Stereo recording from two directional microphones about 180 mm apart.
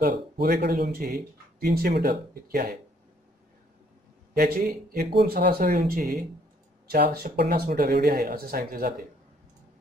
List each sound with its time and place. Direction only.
0.0 s speech: 65° right (ahead or behind)
4.3 s a man's voice: 50° right (ahead or behind)
5.1 s speech: 65° right (ahead or behind)